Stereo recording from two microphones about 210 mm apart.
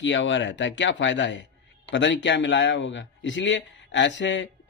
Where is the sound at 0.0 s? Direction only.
60° left (ahead or behind).